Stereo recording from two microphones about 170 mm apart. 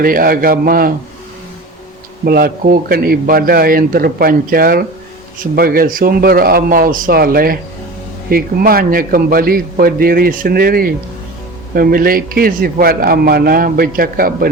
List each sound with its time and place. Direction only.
0.0 s a man's voice: 55° right (ahead or behind)
2.2 s a man's voice: 60° right (ahead or behind)